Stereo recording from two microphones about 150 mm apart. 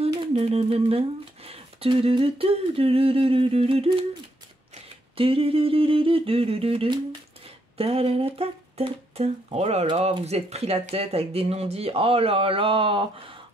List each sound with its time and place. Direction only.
0.0 s speech: 40° right (ahead or behind)
5.1 s speech: 40° right (ahead or behind)